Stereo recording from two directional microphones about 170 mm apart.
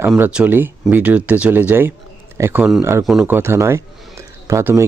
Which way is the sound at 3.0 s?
5° right (ahead or behind).